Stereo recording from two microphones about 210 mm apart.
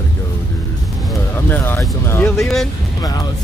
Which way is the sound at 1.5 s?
10° left (ahead or behind).